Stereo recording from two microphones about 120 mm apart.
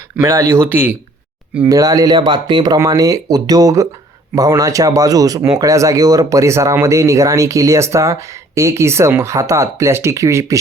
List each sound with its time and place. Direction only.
0.2 s speech: 25° right (ahead or behind)
1.7 s speech: 30° right (ahead or behind)
2.7 s speech: 25° right (ahead or behind)